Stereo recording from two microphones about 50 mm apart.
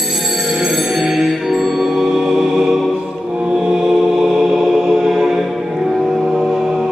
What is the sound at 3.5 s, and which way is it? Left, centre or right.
Mantra, centre.